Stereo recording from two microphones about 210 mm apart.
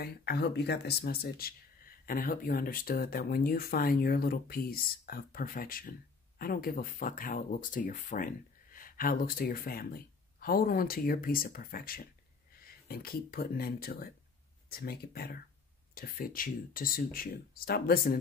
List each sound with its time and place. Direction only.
0.0 s speech: 50° left (ahead or behind)